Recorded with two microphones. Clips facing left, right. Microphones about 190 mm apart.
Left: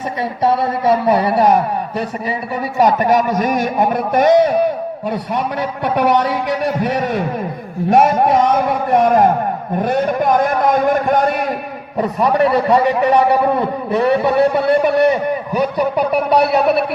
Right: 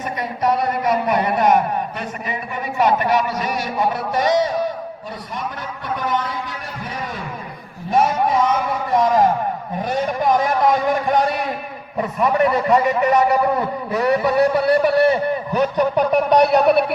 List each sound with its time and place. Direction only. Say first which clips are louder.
0.4 s a man's voice: left 4 dB; 30° left (ahead or behind); by 4.5 s 55° left (ahead or behind)
5.3 s a man's voice: left 6 dB; 65° left (ahead or behind)
7.9 s a man's voice: left 5 dB; 65° left (ahead or behind)
11.9 s a man's voice: left 3 dB; 35° left (ahead or behind); by 16.8 s 5° left (ahead or behind)